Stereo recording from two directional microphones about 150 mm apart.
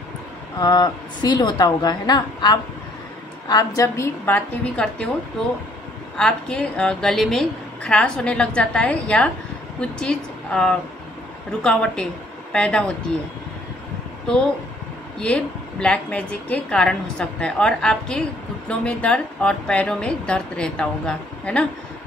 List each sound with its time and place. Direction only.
0.6 s a woman's voice: 30° left (ahead or behind)
4.7 s a woman's voice: 5° left (ahead or behind)
6.1 s a woman's voice: 5° left (ahead or behind)
15.1 s a woman's voice: 5° left (ahead or behind)